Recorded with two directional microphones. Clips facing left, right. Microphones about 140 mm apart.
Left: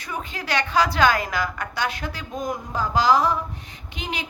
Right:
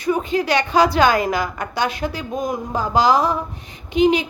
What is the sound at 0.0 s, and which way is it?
Speech, 20° right (ahead or behind).